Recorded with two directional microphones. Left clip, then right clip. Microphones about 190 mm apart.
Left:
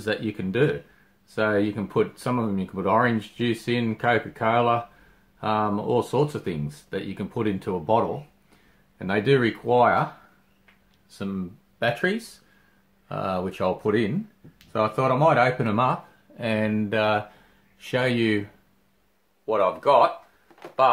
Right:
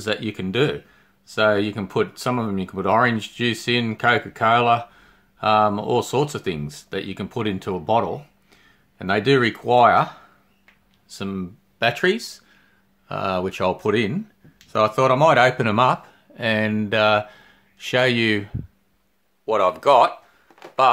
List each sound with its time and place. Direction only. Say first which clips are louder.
0.0 s speech: right 2 dB; 40° right (ahead or behind)
11.1 s speech: right 3 dB; 45° right (ahead or behind)
19.4 s speech: right 3 dB; 45° right (ahead or behind)